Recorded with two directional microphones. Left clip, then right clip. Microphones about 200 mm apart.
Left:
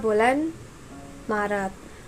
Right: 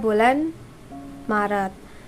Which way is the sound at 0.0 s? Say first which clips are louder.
Right 2 dB; 15° right (ahead or behind).